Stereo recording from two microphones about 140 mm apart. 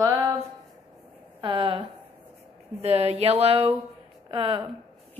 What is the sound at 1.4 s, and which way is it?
Speech, 35° right (ahead or behind).